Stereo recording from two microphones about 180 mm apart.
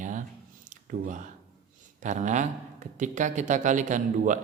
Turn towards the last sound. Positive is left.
turn(degrees=-45)  # may be behind; listen again after turning